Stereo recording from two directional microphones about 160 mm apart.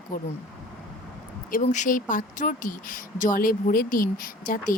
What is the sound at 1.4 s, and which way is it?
Speech, 55° left (ahead or behind).